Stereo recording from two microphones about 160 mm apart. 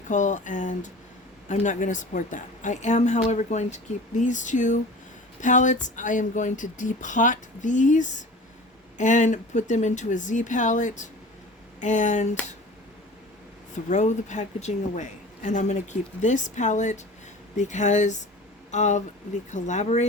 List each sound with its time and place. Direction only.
0.1 s a woman's voice: 50° left (ahead or behind)
13.9 s a woman's voice: 50° left (ahead or behind)